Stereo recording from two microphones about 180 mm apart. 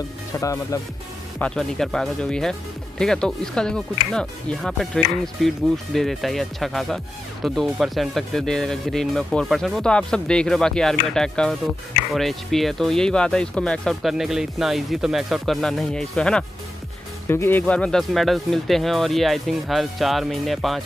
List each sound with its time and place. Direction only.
0.4 s speech: 20° left (ahead or behind)
1.4 s speech: 5° left (ahead or behind)